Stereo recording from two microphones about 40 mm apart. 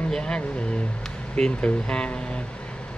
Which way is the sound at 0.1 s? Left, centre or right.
Centre.